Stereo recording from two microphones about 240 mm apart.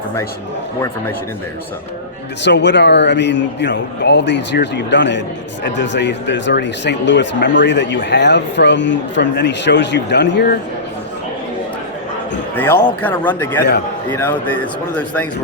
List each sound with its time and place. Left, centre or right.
2.4 s speech: left
12.5 s speech: centre